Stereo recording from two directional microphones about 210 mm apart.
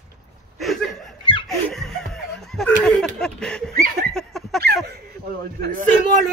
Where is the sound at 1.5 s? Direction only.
Centre (ahead or behind).